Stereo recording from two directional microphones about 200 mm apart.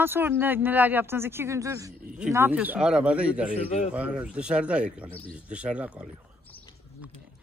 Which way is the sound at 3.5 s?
30° left (ahead or behind).